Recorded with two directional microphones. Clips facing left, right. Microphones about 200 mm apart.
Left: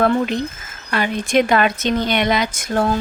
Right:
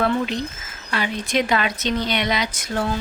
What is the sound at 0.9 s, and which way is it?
Speech, 50° left (ahead or behind).